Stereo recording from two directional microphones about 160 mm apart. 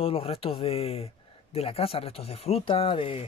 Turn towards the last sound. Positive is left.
turn(degrees=35)  # may be behind; listen again after turning